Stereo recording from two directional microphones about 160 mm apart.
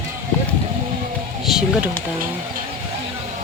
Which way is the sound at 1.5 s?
5° right (ahead or behind).